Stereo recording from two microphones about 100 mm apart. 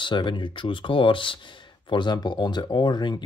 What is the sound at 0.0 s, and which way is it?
Speech, 55° left (ahead or behind).